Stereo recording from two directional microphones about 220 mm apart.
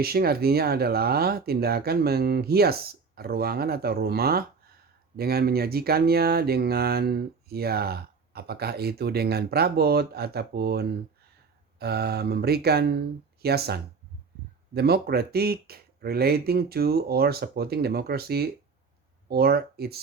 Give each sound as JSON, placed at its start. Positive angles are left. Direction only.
{"t": 0.0, "sound": "speech", "side_deg": -45}